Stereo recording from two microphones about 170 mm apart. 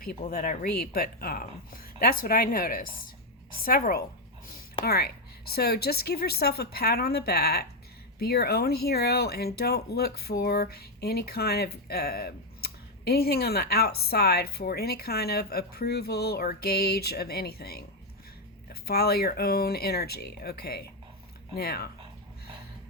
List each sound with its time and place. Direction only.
0.0 s speech: 60° left (ahead or behind)